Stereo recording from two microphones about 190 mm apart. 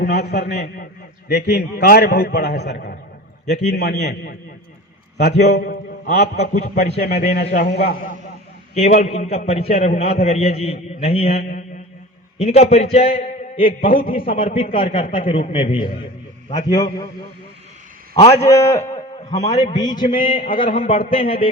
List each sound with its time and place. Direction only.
0.0 s a man's voice: 60° left (ahead or behind)
7.3 s a man's voice: 40° left (ahead or behind)
7.8 s a man's voice: 55° left (ahead or behind)
8.7 s a man's voice: 35° left (ahead or behind)
14.0 s a man's voice: 50° left (ahead or behind)
14.3 s a man's voice: 30° left (ahead or behind)
18.3 s a man's voice: 15° left (ahead or behind)
18.9 s a sound: 25° left (ahead or behind)
19.7 s a man's voice: 20° left (ahead or behind)